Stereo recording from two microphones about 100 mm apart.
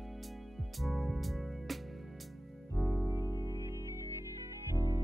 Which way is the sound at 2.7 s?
20° right (ahead or behind).